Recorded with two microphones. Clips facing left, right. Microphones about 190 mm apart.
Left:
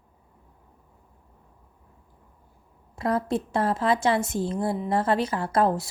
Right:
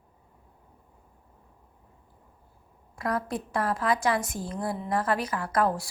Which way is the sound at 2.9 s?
25° left (ahead or behind).